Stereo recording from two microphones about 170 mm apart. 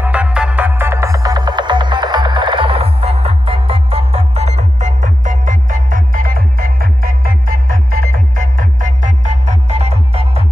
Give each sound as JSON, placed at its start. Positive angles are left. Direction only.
{"t": 0.0, "sound": "music", "side_deg": -5}